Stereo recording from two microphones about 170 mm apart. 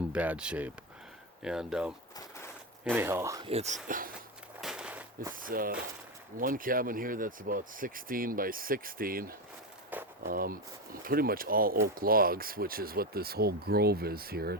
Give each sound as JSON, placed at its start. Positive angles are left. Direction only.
{"t": 0.1, "sound": "speech", "side_deg": -5}
{"t": 2.9, "sound": "speech", "side_deg": -15}
{"t": 3.4, "sound": "speech", "side_deg": -40}
{"t": 3.8, "sound": "speech", "side_deg": -55}
{"t": 4.6, "sound": "a sound", "side_deg": -5}
{"t": 5.3, "sound": "speech", "side_deg": -55}
{"t": 9.9, "sound": "a sound", "side_deg": -10}
{"t": 10.2, "sound": "speech", "side_deg": -60}